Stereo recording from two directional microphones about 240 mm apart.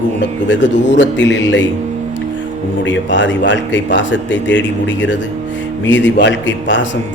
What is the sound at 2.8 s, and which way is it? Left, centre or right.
A man's voice, left.